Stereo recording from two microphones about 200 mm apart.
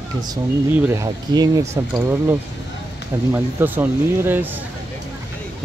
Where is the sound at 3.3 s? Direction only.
10° right (ahead or behind).